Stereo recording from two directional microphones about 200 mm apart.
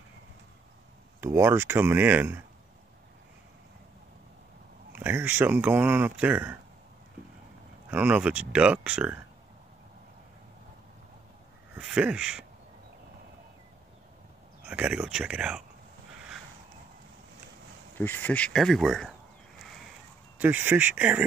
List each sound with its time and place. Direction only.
1.2 s speech: 15° right (ahead or behind)
4.9 s speech: 10° right (ahead or behind)
7.9 s speech: 5° right (ahead or behind)
11.7 s speech: 5° right (ahead or behind)
14.7 s speech: 5° right (ahead or behind)
17.9 s speech: 10° left (ahead or behind)
20.3 s speech: 10° right (ahead or behind)